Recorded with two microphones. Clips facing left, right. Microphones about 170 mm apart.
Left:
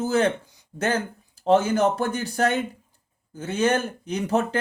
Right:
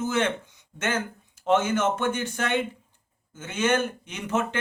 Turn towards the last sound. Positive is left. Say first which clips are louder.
# left 4 dB
turn(degrees=35)  # may be behind; listen again after turning